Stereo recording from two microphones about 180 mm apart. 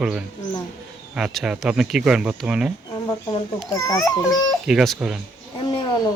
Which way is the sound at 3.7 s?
20° left (ahead or behind).